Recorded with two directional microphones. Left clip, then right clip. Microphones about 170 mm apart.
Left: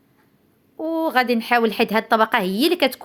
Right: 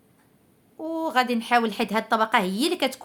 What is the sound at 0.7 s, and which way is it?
Speech, 25° left (ahead or behind).